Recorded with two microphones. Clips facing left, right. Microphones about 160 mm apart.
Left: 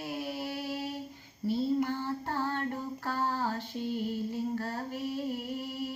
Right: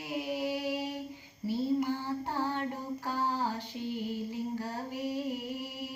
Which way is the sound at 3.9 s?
15° right (ahead or behind).